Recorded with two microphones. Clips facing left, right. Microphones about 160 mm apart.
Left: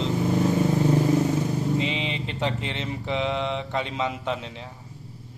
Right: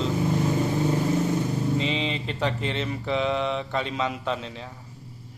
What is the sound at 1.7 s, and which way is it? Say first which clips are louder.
Speech: right 1 dB; 20° left (ahead or behind).